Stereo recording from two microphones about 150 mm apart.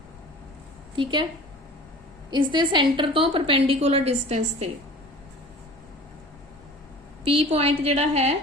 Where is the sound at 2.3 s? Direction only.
30° right (ahead or behind).